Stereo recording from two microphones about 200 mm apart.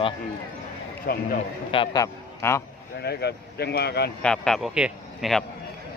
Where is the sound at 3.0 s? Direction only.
55° left (ahead or behind).